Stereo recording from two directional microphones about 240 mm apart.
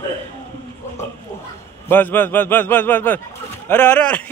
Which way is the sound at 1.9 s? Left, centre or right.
Centre.